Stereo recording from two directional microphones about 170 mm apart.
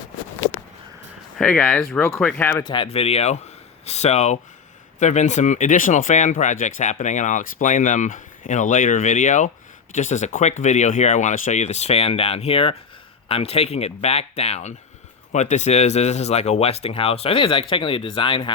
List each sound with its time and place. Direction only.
1.4 s speech: 5° left (ahead or behind)
2.6 s speech: 30° left (ahead or behind)